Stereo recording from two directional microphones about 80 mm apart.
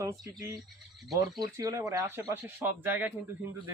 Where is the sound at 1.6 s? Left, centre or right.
Right.